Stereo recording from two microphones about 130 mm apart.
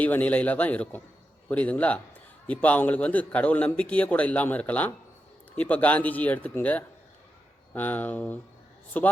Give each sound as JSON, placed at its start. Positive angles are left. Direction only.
{"t": 0.0, "sound": "a man's voice", "side_deg": 15}